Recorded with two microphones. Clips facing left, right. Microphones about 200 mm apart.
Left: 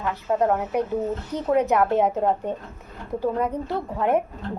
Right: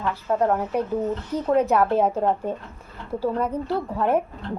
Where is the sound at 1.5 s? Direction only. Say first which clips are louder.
Even; 15° left (ahead or behind).